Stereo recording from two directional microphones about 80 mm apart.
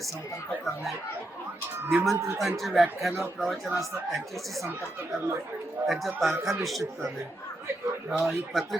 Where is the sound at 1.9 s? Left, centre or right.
Centre.